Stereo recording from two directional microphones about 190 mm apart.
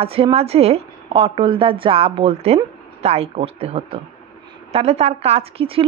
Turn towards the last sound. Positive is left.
turn(degrees=-30)  # may be behind; listen again after turning